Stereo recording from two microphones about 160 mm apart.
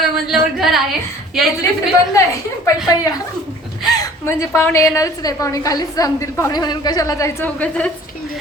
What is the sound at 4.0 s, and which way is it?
A woman's voice, 15° left (ahead or behind).